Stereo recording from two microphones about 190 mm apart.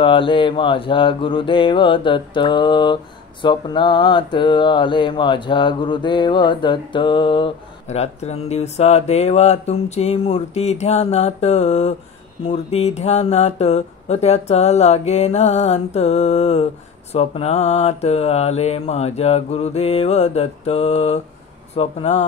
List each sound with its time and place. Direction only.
0.0 s mantra: 25° left (ahead or behind)
12.4 s speech: 35° left (ahead or behind)